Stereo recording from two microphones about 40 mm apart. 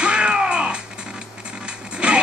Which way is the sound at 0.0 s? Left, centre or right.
Right.